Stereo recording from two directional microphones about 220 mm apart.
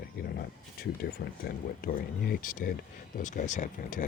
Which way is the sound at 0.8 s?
45° left (ahead or behind).